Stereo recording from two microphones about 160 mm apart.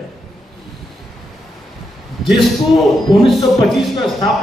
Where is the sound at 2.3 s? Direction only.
30° left (ahead or behind).